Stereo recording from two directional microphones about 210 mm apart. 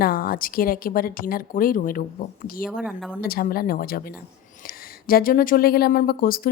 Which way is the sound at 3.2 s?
45° left (ahead or behind).